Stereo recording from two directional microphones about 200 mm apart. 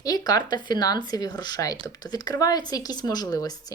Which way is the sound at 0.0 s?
20° left (ahead or behind).